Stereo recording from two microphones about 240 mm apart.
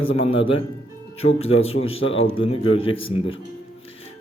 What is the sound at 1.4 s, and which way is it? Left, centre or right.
A man's voice, left.